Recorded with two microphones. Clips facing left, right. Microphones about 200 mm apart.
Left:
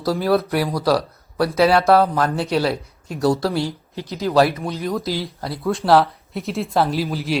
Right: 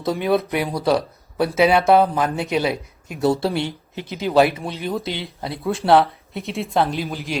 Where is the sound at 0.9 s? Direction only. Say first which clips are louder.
Even; 20° right (ahead or behind).